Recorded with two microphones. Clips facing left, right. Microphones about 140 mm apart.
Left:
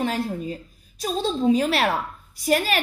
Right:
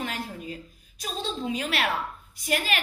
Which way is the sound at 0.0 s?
35° left (ahead or behind).